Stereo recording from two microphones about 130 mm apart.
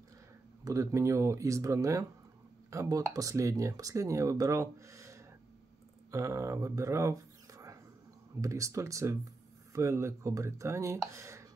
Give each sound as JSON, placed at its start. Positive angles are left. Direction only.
{"t": 0.7, "sound": "speech", "side_deg": -25}